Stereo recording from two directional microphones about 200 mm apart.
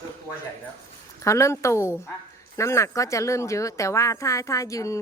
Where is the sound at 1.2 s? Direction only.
15° left (ahead or behind).